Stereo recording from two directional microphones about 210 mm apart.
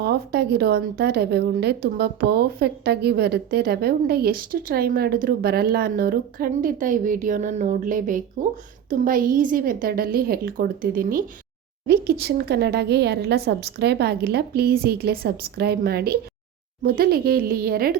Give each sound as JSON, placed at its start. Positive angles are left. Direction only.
{"t": 0.0, "sound": "a woman's voice", "side_deg": -50}